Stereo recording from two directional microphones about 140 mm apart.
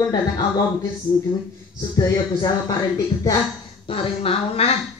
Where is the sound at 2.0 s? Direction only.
25° left (ahead or behind).